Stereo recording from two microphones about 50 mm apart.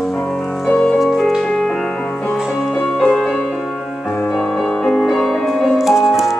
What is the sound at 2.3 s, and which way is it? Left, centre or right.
Music, centre.